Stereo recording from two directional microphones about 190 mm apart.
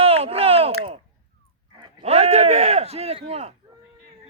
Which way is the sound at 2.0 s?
35° right (ahead or behind).